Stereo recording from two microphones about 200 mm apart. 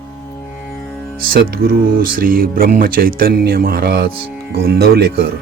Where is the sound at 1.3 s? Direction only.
45° right (ahead or behind).